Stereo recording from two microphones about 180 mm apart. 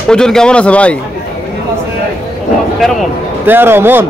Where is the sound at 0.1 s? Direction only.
5° left (ahead or behind).